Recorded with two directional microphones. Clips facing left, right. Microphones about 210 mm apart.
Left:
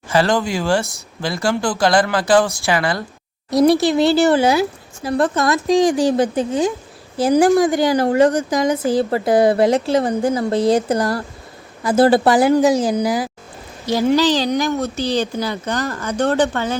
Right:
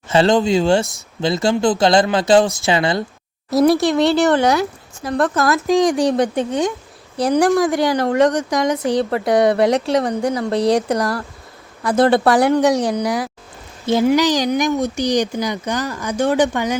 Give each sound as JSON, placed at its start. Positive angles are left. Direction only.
{"t": 0.1, "sound": "speech", "side_deg": -25}
{"t": 3.5, "sound": "speech", "side_deg": 0}
{"t": 14.1, "sound": "a woman's voice", "side_deg": -15}